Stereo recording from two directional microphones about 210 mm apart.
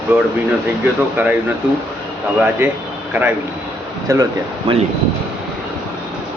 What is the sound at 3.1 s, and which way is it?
A man's voice, 10° right (ahead or behind).